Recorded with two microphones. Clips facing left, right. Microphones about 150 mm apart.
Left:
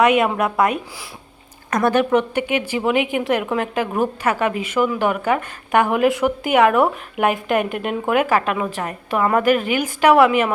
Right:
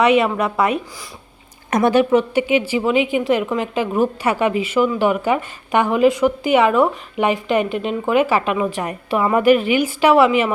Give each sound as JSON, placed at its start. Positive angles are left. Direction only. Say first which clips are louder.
{"t": 0.0, "sound": "a woman's voice", "louder": "right 1 dB", "side_deg": 0}
{"t": 1.7, "sound": "speech", "louder": "right 2 dB", "side_deg": -20}
{"t": 2.1, "sound": "speech", "louder": "right 3 dB", "side_deg": 55}
{"t": 2.8, "sound": "a woman's voice", "louder": "right 2 dB", "side_deg": 0}
{"t": 9.5, "sound": "a woman's voice", "louder": "right 4 dB", "side_deg": 45}
{"t": 9.8, "sound": "a woman's voice", "louder": "left 3 dB", "side_deg": 0}